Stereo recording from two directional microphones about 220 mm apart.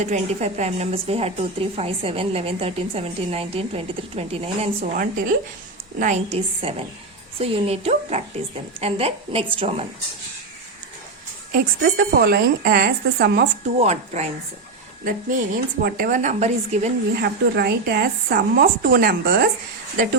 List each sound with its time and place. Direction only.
0.0 s a woman's voice: 30° right (ahead or behind)
4.8 s a woman's voice: 40° right (ahead or behind)
11.5 s speech: 45° right (ahead or behind)
13.7 s a woman's voice: 30° right (ahead or behind)
17.2 s speech: 45° right (ahead or behind)